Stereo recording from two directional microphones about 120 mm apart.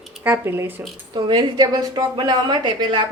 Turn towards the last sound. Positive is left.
turn(degrees=-40)  # may be behind; listen again after turning